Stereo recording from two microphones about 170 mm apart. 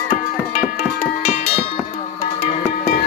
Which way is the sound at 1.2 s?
45° left (ahead or behind).